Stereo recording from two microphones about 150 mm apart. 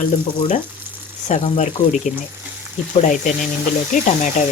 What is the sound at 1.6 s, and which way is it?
Speech, 55° left (ahead or behind).